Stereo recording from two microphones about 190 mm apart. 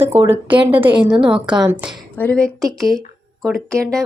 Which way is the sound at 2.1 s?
5° left (ahead or behind).